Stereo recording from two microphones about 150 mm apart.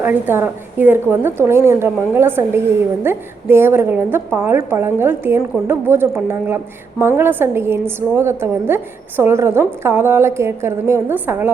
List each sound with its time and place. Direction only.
0.0 s a woman's voice: 15° right (ahead or behind)